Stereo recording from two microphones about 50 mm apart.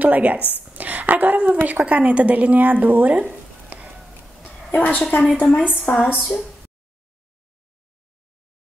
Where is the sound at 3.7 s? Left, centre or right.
Right.